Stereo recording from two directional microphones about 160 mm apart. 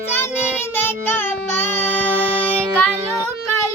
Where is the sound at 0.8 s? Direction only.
15° left (ahead or behind).